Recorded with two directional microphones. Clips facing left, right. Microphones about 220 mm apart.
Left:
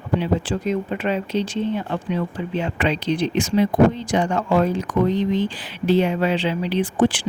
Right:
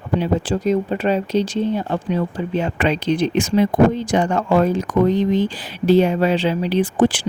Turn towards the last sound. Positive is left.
turn(degrees=-40)  # may be behind; listen again after turning